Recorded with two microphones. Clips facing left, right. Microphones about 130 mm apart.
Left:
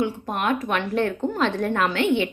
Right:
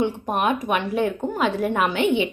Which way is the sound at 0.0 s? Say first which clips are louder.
Right 3 dB; 20° right (ahead or behind).